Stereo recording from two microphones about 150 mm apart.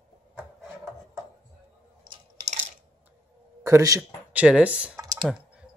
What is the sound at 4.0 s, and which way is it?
Speech, 10° right (ahead or behind).